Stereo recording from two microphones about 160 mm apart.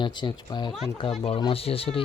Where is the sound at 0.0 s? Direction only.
30° left (ahead or behind).